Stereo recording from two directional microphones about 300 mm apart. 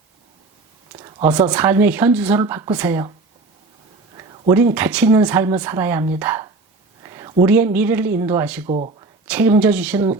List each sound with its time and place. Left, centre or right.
0.9 s speech: centre
4.2 s speech: centre
7.0 s a sound: centre
7.4 s speech: centre
8.6 s speech: right
9.2 s speech: centre